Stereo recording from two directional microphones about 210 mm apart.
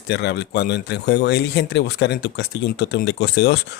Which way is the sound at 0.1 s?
50° left (ahead or behind).